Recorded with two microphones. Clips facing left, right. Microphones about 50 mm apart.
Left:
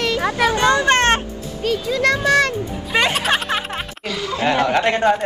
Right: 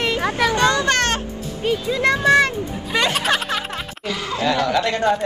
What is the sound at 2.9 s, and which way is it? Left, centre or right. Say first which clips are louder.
Speech: left 2 dB; centre.